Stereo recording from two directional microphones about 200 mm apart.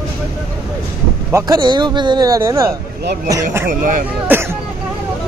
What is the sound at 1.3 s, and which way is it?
A man's voice, 15° right (ahead or behind).